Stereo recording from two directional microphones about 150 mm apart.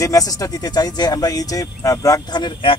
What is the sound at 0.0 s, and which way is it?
Speech, 25° left (ahead or behind).